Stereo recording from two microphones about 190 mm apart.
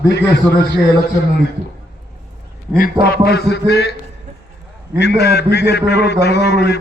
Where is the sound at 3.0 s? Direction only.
60° left (ahead or behind).